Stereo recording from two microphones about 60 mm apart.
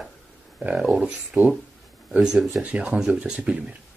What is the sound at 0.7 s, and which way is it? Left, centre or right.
Speech, centre.